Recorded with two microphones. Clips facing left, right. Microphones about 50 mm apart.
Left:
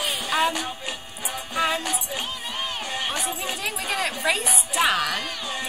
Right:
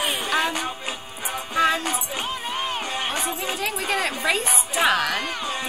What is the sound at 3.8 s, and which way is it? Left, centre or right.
A woman's voice, centre.